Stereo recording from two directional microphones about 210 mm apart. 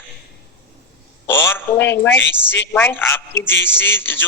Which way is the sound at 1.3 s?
10° left (ahead or behind).